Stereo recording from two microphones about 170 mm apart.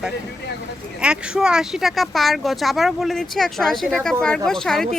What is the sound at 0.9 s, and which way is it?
Speech, 5° right (ahead or behind).